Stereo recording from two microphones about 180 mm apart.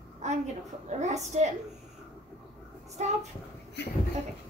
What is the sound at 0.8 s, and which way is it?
Speech, 40° right (ahead or behind).